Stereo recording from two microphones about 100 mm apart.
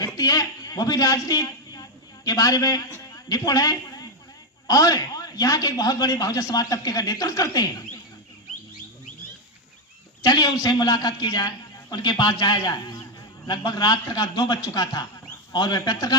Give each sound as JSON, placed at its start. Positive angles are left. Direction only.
{"t": 0.0, "sound": "a sound", "side_deg": 40}
{"t": 2.9, "sound": "a man's voice", "side_deg": 35}
{"t": 10.2, "sound": "a man's voice", "side_deg": 40}